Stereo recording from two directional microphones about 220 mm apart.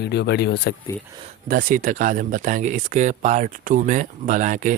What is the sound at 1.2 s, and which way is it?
Speech, 35° right (ahead or behind).